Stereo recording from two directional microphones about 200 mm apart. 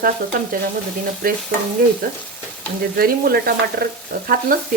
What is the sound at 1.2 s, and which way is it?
Frying, 45° right (ahead or behind).